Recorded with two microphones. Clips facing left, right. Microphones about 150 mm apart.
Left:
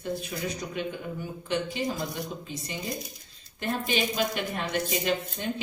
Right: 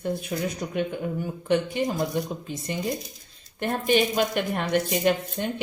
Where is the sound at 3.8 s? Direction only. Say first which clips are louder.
Right 8 dB; 55° right (ahead or behind).